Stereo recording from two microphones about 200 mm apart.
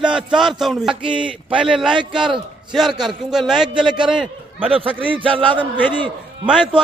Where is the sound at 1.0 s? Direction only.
25° right (ahead or behind).